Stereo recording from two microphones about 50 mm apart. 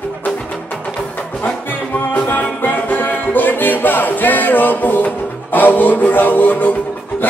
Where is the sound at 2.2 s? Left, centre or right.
Left.